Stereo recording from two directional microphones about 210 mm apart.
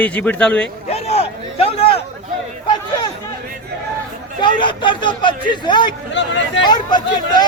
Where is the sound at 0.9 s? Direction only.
30° left (ahead or behind).